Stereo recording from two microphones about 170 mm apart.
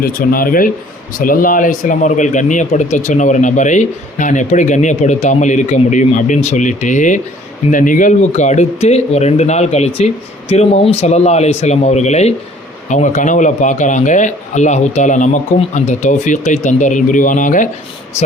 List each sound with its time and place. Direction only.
0.0 s speech: 55° left (ahead or behind)